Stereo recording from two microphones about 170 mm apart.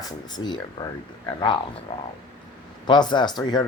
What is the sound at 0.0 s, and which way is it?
Speech, 25° left (ahead or behind).